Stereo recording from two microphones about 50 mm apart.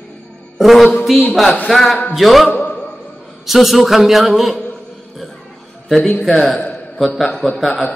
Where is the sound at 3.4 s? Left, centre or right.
Centre.